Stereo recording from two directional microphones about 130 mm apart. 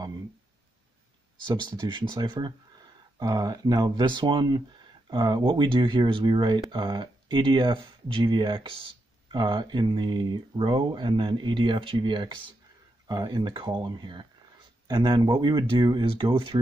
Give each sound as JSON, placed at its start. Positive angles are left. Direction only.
{"t": 1.5, "sound": "speech", "side_deg": -35}